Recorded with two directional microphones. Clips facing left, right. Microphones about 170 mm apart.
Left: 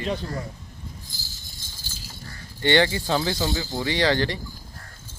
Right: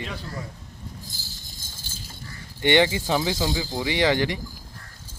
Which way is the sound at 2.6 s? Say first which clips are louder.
Right 1 dB; 15° right (ahead or behind).